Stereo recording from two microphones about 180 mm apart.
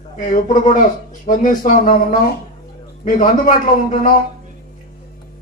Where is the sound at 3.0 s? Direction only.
50° left (ahead or behind).